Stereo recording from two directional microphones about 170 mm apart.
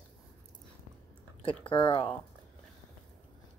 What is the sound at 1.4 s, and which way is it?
Speech, 30° left (ahead or behind).